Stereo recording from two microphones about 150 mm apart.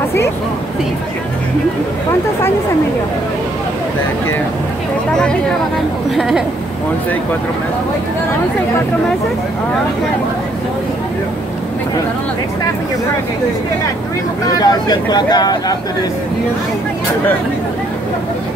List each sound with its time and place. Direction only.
6.1 s speech: centre (ahead or behind)
14.5 s speech: 25° left (ahead or behind)